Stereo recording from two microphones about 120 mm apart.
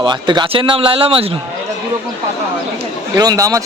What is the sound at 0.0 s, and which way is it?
Speech, 40° right (ahead or behind).